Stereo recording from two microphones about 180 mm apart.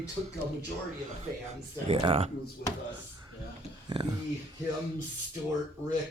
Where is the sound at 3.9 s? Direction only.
25° right (ahead or behind).